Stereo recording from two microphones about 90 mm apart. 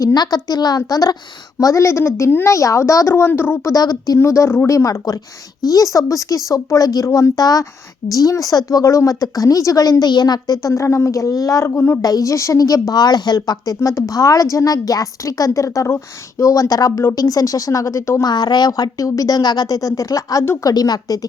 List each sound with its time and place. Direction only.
0.0 s a woman's voice: 45° left (ahead or behind); by 3.7 s 25° left (ahead or behind)
3.7 s speech: 45° left (ahead or behind)
4.2 s a woman's voice: 30° left (ahead or behind)
11.7 s speech: 25° left (ahead or behind)
12.0 s a woman's voice: 40° left (ahead or behind)
18.3 s speech: 55° left (ahead or behind)